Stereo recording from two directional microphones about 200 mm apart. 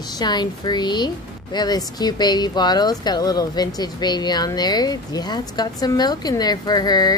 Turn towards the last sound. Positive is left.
turn(degrees=20)  # may be behind; listen again after turning